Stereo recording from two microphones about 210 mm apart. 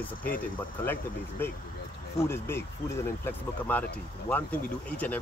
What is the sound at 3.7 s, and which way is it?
Speech, 10° left (ahead or behind).